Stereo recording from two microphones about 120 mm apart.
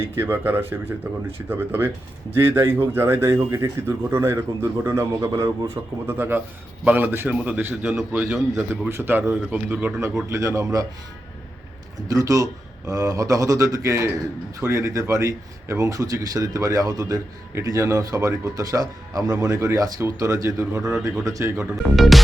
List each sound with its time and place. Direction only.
0.2 s a man's voice: 20° right (ahead or behind)
12.0 s speech: 30° right (ahead or behind)
21.8 s speech: centre (ahead or behind)